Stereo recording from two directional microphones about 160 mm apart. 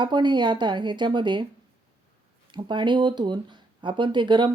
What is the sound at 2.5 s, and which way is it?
Speech, 30° right (ahead or behind).